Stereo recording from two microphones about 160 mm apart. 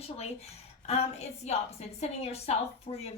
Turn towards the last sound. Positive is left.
turn(degrees=40)  # may be behind; listen again after turning